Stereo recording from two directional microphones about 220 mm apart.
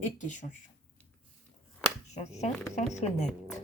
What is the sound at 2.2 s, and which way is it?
Speech, 30° left (ahead or behind).